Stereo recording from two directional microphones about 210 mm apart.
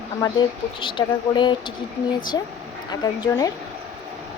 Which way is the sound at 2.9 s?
15° left (ahead or behind).